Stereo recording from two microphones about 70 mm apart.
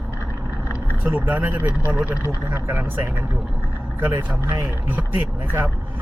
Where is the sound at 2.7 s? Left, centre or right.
Right.